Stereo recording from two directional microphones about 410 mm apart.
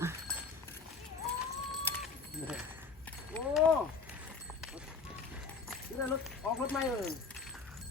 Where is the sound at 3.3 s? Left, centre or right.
Centre.